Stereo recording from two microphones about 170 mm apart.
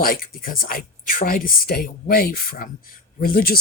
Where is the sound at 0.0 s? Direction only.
60° left (ahead or behind).